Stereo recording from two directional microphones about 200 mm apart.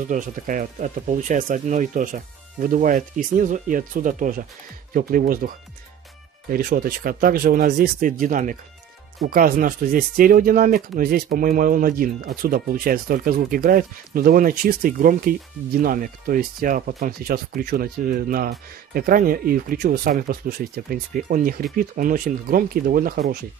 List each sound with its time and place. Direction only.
0.1 s speech: 40° right (ahead or behind)
6.5 s speech: 45° right (ahead or behind)